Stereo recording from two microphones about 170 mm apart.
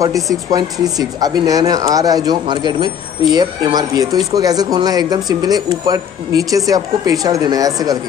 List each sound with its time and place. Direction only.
0.0 s speech: 20° right (ahead or behind)